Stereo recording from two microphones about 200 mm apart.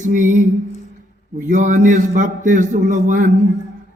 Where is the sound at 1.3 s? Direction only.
40° right (ahead or behind).